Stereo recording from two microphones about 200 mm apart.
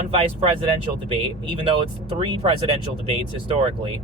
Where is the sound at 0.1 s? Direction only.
25° right (ahead or behind).